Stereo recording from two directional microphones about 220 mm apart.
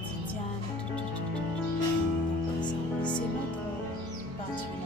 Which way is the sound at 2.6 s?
20° left (ahead or behind).